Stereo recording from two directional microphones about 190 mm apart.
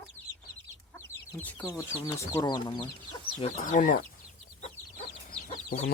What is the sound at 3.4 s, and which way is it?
Speech, 40° left (ahead or behind).